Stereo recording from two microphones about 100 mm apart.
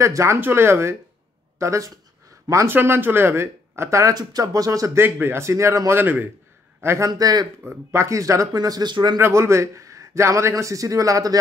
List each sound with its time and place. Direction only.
0.0 s a man's voice: 30° right (ahead or behind)
2.7 s a man's voice: 20° right (ahead or behind)
7.1 s a man's voice: 40° right (ahead or behind)
7.6 s a man's voice: 25° right (ahead or behind); by 9.2 s 45° right (ahead or behind)
9.2 s a man's voice: 30° right (ahead or behind)